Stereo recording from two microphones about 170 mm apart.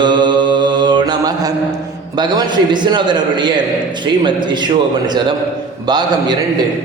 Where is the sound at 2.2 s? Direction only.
25° right (ahead or behind).